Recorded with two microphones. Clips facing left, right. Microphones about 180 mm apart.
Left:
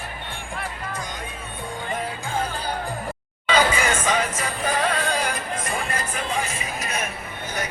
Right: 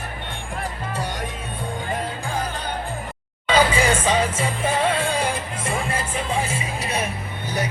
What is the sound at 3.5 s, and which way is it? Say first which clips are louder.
Music: right 2 dB; 30° right (ahead or behind).